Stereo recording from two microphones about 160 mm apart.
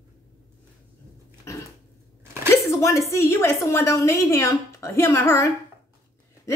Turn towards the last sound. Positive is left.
turn(degrees=15)  # may be behind; listen again after turning